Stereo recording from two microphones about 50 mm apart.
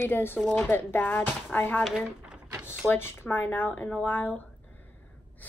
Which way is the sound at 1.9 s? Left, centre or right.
Centre.